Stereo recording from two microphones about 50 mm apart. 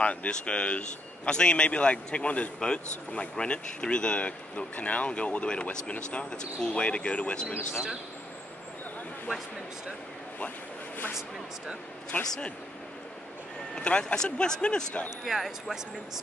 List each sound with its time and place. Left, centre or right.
0.0 s a man's voice: left
7.7 s speech: centre
12.1 s a man's voice: left
13.7 s a man's voice: left
15.2 s speech: centre